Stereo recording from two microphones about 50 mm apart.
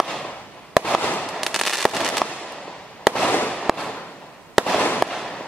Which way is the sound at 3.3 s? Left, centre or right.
Left.